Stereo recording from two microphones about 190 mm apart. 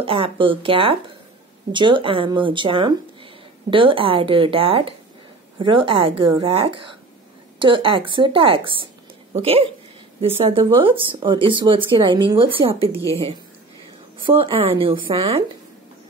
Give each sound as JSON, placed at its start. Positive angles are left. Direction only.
{"t": 0.0, "sound": "speech", "side_deg": -30}
{"t": 14.2, "sound": "speech", "side_deg": -30}